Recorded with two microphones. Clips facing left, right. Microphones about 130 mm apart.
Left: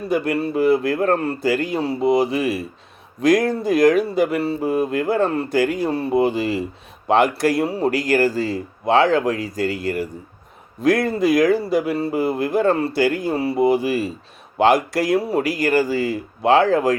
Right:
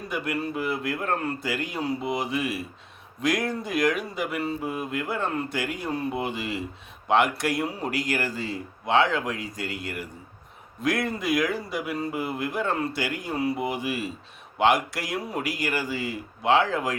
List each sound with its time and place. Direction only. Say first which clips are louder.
0.1 s speech: left 9 dB; 35° left (ahead or behind)